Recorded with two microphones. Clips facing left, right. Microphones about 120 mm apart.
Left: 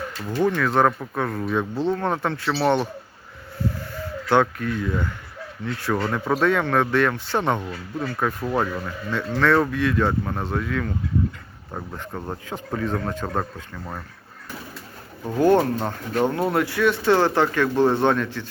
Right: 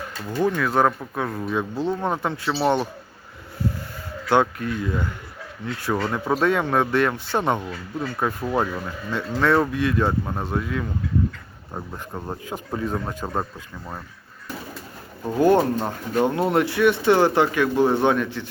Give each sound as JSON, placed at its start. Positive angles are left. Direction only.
{"t": 0.3, "sound": "speech", "side_deg": -15}
{"t": 4.3, "sound": "speech", "side_deg": -15}
{"t": 11.7, "sound": "speech", "side_deg": -5}
{"t": 15.2, "sound": "speech", "side_deg": -15}